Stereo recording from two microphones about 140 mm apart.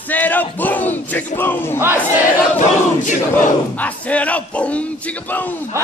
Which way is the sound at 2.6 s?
65° left (ahead or behind).